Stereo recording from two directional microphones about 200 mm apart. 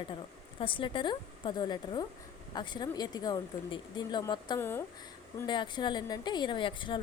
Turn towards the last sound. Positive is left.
turn(degrees=25)  # may be behind; listen again after turning